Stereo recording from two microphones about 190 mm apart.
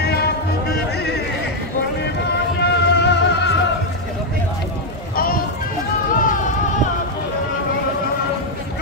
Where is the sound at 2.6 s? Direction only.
60° left (ahead or behind).